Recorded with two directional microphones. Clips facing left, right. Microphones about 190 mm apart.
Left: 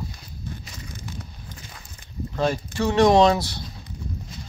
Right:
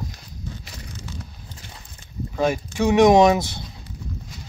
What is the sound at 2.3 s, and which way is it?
Speech, 10° right (ahead or behind).